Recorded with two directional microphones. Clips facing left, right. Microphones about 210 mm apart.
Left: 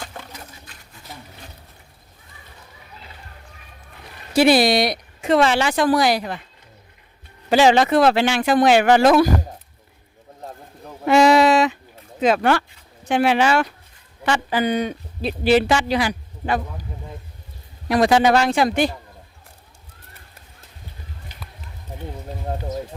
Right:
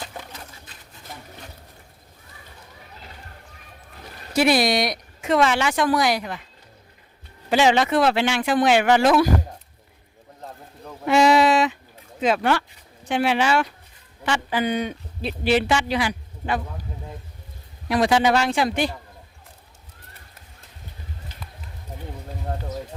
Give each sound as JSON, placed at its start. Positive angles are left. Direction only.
{"t": 4.4, "sound": "speech", "side_deg": 30}
{"t": 7.5, "sound": "speech", "side_deg": 35}
{"t": 11.0, "sound": "a man's voice", "side_deg": 40}
{"t": 17.8, "sound": "a man's voice", "side_deg": 45}